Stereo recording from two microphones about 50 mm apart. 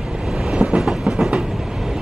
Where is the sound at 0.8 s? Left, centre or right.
Centre.